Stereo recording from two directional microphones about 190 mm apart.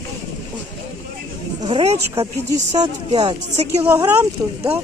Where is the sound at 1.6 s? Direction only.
30° right (ahead or behind).